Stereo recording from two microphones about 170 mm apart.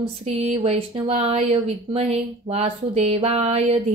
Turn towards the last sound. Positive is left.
turn(degrees=-35)  # may be behind; listen again after turning